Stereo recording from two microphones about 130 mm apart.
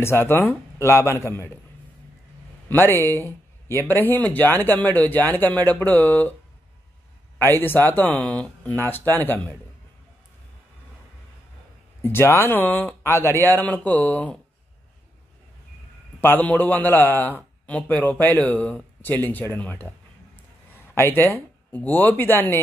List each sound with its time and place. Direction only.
0.0 s speech: 20° left (ahead or behind)
2.7 s speech: 15° left (ahead or behind)
7.3 s speech: 15° left (ahead or behind)
12.0 s speech: 20° left (ahead or behind)
16.2 s speech: 15° left (ahead or behind)
20.9 s speech: 15° left (ahead or behind)